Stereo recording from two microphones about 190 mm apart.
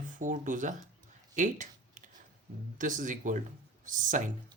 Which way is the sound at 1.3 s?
40° right (ahead or behind).